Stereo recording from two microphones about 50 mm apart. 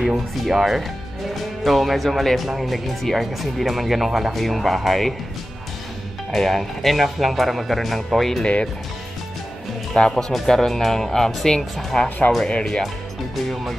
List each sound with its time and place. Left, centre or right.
0.4 s speech: centre
6.3 s speech: centre
9.9 s speech: centre
13.4 s speech: centre